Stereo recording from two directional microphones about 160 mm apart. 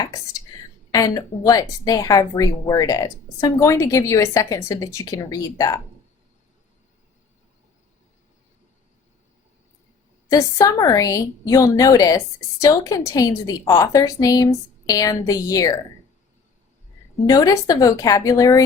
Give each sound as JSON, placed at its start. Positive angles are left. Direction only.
{"t": 0.0, "sound": "a woman's voice", "side_deg": 20}
{"t": 10.2, "sound": "a woman's voice", "side_deg": 20}
{"t": 17.2, "sound": "a woman's voice", "side_deg": 20}